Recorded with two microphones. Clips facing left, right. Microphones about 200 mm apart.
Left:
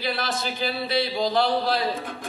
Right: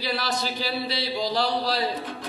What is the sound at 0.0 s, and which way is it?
Speech, 50° left (ahead or behind).